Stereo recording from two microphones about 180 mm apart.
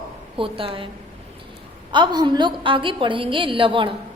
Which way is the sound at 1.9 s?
25° right (ahead or behind).